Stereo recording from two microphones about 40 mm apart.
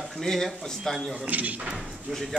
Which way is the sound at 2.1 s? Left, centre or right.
Right.